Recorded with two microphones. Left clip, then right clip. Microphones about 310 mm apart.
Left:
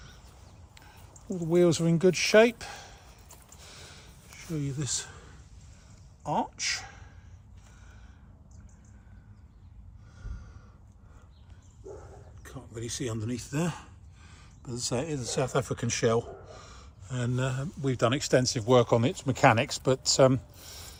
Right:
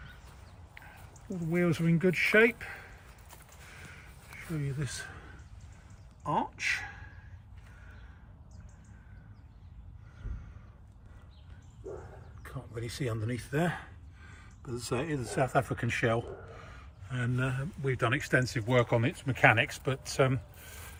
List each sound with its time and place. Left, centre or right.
1.1 s speech: centre
4.4 s speech: centre
6.2 s speech: centre
12.4 s a sound: centre
13.1 s speech: centre